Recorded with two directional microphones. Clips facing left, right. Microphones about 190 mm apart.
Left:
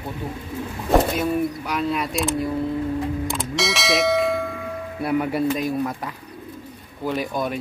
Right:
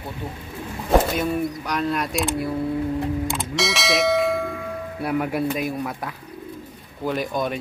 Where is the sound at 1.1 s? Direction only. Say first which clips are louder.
Left 1 dB; 5° left (ahead or behind).